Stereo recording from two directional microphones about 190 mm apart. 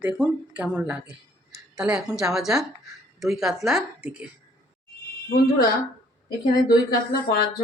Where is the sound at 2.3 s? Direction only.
Centre (ahead or behind).